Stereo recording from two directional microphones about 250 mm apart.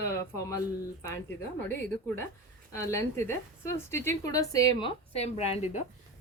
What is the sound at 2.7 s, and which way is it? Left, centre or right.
A woman's voice, centre.